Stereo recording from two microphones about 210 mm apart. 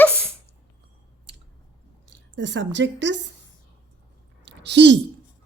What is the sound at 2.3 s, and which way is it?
Speech, 60° right (ahead or behind).